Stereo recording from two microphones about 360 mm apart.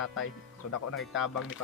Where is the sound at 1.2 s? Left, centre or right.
Left.